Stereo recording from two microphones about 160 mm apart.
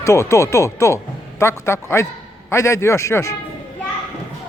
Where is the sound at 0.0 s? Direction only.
15° left (ahead or behind).